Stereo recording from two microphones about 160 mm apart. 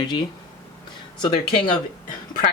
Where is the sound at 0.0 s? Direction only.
30° left (ahead or behind).